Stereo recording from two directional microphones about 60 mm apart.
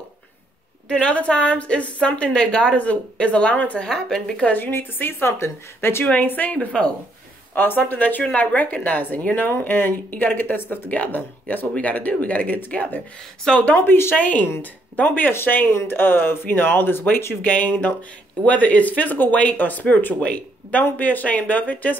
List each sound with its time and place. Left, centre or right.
0.8 s speech: centre
3.8 s speech: centre
4.5 s speech: left
6.0 s speech: left
7.5 s speech: left
13.4 s speech: centre
13.8 s speech: left
14.1 s speech: left
17.4 s speech: left